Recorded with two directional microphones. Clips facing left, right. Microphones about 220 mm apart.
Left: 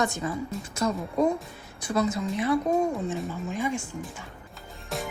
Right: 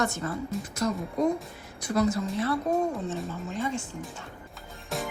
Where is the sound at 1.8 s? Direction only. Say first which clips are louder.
Even; 20° left (ahead or behind).